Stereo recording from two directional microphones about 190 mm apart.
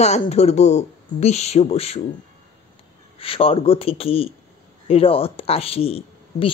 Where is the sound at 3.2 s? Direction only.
30° left (ahead or behind).